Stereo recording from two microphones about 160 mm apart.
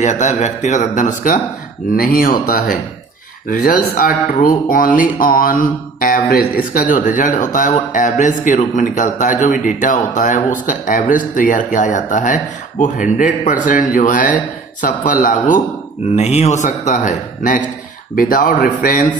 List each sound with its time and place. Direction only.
0.0 s speech: 50° left (ahead or behind)
16.2 s speech: 45° left (ahead or behind); by 19.1 s 60° left (ahead or behind)